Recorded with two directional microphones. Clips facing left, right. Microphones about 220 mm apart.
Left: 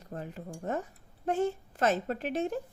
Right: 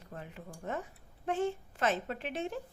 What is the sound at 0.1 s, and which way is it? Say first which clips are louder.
Speech: left 6 dB; 40° left (ahead or behind).